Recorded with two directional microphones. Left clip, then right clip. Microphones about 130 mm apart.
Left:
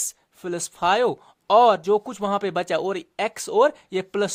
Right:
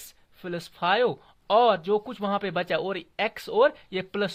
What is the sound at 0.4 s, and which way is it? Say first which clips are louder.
Speech: left 4 dB; 55° left (ahead or behind).